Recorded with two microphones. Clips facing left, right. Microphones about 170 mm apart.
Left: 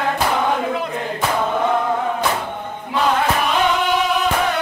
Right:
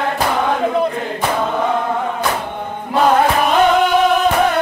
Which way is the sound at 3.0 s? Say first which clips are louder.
Right 5 dB; 45° right (ahead or behind).